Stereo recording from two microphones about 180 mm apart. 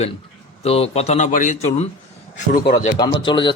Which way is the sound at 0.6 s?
35° left (ahead or behind).